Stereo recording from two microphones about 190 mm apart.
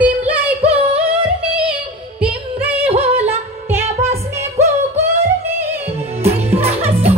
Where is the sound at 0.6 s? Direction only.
30° right (ahead or behind).